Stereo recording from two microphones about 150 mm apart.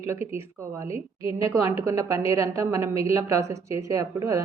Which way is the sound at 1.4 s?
20° right (ahead or behind).